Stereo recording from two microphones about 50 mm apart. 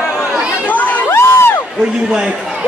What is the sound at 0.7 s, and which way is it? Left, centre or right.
Crowd, left.